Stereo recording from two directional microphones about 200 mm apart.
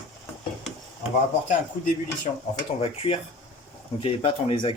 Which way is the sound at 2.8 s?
30° left (ahead or behind).